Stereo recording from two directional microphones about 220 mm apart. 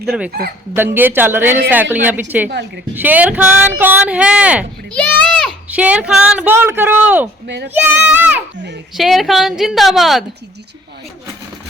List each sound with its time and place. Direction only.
0.0 s a woman's voice: centre (ahead or behind)
2.5 s a woman's voice: 50° right (ahead or behind)
2.9 s speech: 10° right (ahead or behind)
4.9 s a sound: 5° left (ahead or behind)
5.7 s speech: 5° right (ahead or behind)
7.4 s a woman's voice: 50° right (ahead or behind)
7.7 s a woman's voice: 5° right (ahead or behind)